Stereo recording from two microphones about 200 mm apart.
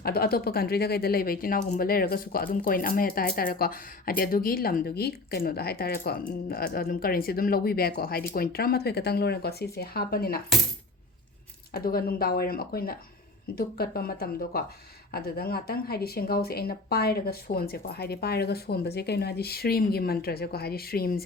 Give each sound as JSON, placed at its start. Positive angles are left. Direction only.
{"t": 0.0, "sound": "speech", "side_deg": 50}
{"t": 11.7, "sound": "speech", "side_deg": 50}